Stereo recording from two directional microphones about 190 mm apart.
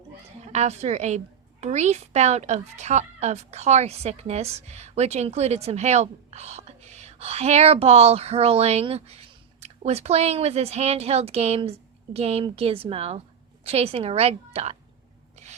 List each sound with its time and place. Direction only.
0.4 s speech: 35° right (ahead or behind)